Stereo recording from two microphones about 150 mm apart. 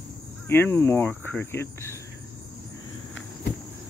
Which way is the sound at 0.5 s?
15° left (ahead or behind).